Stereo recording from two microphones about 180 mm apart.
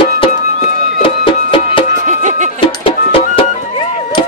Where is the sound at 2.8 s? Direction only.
30° left (ahead or behind).